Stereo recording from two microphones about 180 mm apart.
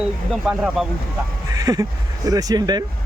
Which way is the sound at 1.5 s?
20° right (ahead or behind).